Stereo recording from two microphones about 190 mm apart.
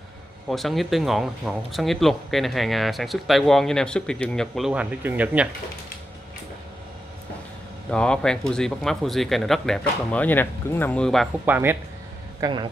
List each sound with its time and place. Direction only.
0.5 s speech: centre (ahead or behind)
7.9 s speech: 5° left (ahead or behind)
11.4 s speech: 10° right (ahead or behind)
12.4 s speech: 20° right (ahead or behind)